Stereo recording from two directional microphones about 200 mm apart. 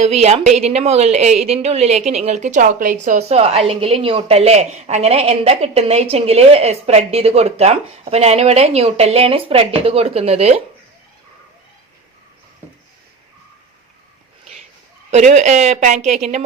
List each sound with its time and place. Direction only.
0.0 s a woman's voice: 30° right (ahead or behind)
15.1 s a woman's voice: 35° right (ahead or behind)